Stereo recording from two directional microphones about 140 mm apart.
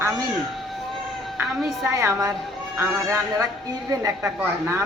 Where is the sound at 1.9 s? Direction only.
20° right (ahead or behind).